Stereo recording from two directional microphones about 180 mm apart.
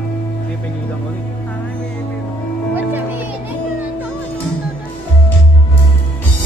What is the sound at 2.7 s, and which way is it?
Music, 10° right (ahead or behind).